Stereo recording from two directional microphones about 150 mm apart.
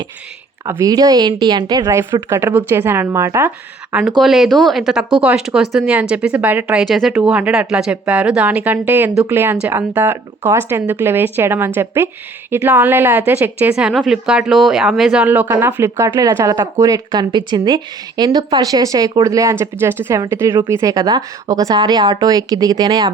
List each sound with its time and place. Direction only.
0.6 s speech: 20° right (ahead or behind)
4.2 s speech: centre (ahead or behind); by 23.1 s 25° right (ahead or behind)